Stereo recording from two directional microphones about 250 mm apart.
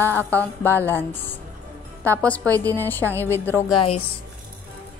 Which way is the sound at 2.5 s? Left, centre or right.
Centre.